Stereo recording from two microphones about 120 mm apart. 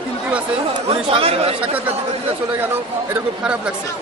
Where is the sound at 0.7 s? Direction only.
50° right (ahead or behind).